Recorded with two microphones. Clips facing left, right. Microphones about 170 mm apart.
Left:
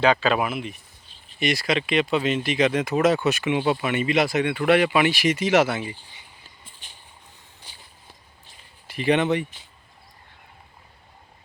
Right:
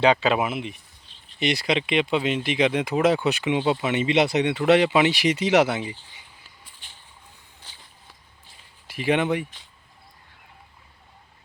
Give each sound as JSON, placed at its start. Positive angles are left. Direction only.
{"t": 0.0, "sound": "speech", "side_deg": -20}
{"t": 6.7, "sound": "a sound", "side_deg": 15}
{"t": 8.9, "sound": "speech", "side_deg": -10}